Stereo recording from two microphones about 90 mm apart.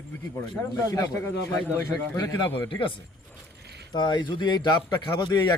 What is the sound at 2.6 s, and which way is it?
Speech, 70° left (ahead or behind).